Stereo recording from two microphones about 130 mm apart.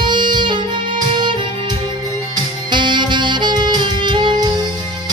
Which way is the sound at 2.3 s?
35° right (ahead or behind).